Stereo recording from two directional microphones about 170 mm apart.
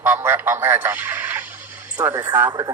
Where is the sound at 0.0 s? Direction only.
10° right (ahead or behind).